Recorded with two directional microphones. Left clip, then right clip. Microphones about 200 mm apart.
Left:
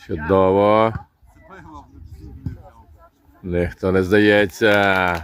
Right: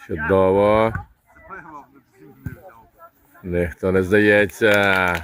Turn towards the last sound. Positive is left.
turn(degrees=0)  # may be behind; listen again after turning